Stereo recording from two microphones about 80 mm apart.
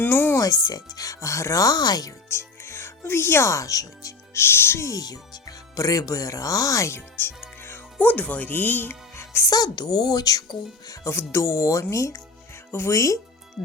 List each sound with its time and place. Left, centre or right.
0.0 s music: left
0.3 s speech: left
2.3 s speech: left
4.4 s speech: left
7.6 s music: left
9.4 s speech: left
11.0 s speech: left